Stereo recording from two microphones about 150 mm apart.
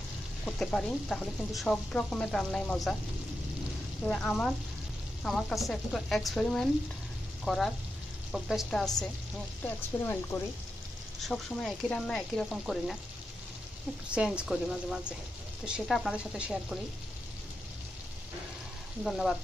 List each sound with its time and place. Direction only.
0.5 s speech: 5° left (ahead or behind)
4.0 s speech: 5° left (ahead or behind)
9.9 s speech: 15° left (ahead or behind)
11.2 s speech: centre (ahead or behind)
14.1 s speech: 5° right (ahead or behind)
19.0 s speech: centre (ahead or behind)